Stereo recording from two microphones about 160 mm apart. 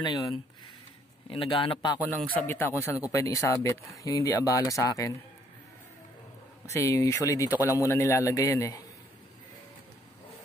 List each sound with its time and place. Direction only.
0.0 s a man's voice: 25° left (ahead or behind)
2.4 s speech: 15° left (ahead or behind)
6.6 s speech: 20° left (ahead or behind)